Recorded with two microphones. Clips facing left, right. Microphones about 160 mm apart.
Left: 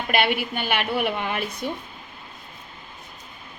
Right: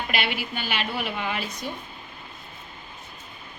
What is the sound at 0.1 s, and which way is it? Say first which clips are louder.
A woman's voice: left 9 dB; 55° left (ahead or behind).